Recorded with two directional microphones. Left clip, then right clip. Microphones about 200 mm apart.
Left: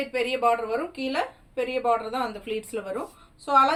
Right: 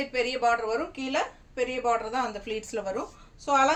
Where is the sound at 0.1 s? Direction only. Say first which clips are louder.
Left 2 dB; 15° right (ahead or behind).